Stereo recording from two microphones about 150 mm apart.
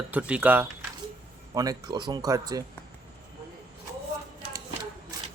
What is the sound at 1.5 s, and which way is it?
Speech, 25° right (ahead or behind).